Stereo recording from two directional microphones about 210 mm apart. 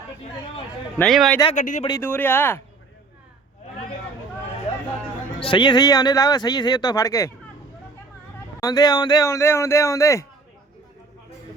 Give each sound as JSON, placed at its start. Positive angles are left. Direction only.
{"t": 0.9, "sound": "a man's voice", "side_deg": 0}
{"t": 1.5, "sound": "speech", "side_deg": 35}
{"t": 1.9, "sound": "speech", "side_deg": 10}
{"t": 4.7, "sound": "hubbub", "side_deg": 30}
{"t": 5.4, "sound": "speech", "side_deg": 25}
{"t": 8.6, "sound": "speech", "side_deg": 15}